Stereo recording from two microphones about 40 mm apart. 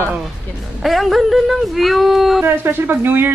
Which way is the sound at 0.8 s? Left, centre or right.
Centre.